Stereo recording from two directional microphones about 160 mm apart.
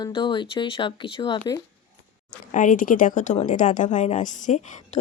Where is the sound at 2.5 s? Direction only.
50° left (ahead or behind).